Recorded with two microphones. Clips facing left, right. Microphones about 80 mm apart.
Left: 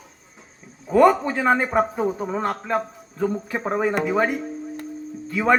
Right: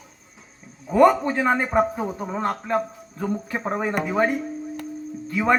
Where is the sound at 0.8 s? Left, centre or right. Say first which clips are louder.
Even; centre.